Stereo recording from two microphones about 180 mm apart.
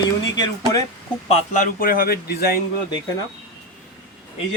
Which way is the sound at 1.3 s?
35° left (ahead or behind).